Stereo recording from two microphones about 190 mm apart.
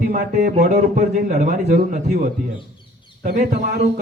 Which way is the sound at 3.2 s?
40° right (ahead or behind).